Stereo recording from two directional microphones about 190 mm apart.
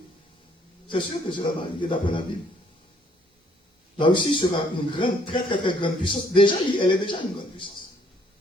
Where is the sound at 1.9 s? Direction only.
25° left (ahead or behind).